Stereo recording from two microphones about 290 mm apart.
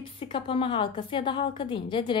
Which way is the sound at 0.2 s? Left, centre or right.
Centre.